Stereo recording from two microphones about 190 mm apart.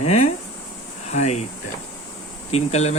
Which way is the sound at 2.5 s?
35° left (ahead or behind).